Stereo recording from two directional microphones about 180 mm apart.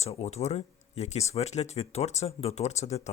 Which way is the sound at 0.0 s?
35° left (ahead or behind).